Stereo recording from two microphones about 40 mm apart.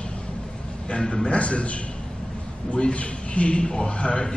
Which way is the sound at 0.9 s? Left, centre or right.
Centre.